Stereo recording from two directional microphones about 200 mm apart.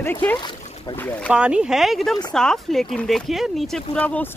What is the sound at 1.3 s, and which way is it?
Speech, 5° right (ahead or behind).